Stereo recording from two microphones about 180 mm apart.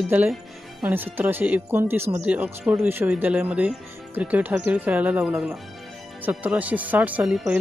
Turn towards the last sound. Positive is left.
turn(degrees=-5)  # may be behind; listen again after turning